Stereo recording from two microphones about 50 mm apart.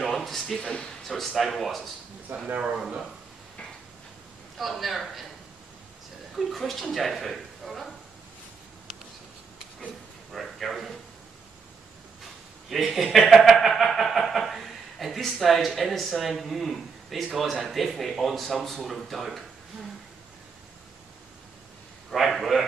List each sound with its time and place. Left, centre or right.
0.1 s a sound: centre
1.0 s speech: centre
2.3 s speech: right
2.6 s speech: centre
4.6 s speech: centre
6.3 s speech: centre
10.3 s speech: centre
12.6 s speech: centre
22.1 s speech: centre